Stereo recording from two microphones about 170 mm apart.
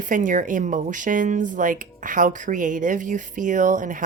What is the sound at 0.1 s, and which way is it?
Speech, 50° right (ahead or behind).